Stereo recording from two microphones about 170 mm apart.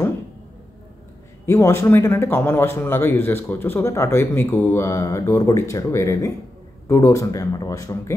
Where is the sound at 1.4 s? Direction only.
15° left (ahead or behind).